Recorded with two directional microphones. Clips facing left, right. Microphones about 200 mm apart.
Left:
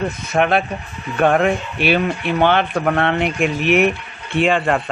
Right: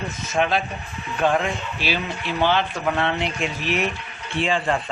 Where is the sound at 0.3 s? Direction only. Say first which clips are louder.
Left 4 dB; 60° left (ahead or behind).